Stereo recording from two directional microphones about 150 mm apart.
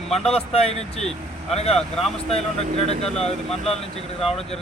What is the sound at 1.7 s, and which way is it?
Speech, centre (ahead or behind).